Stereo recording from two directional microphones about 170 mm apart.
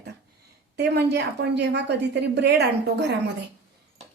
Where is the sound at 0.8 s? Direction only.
75° right (ahead or behind).